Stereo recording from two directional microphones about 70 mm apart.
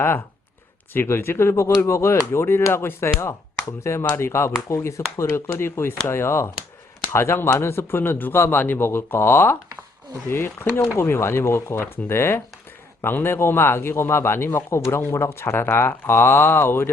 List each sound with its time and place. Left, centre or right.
0.9 s a man's voice: left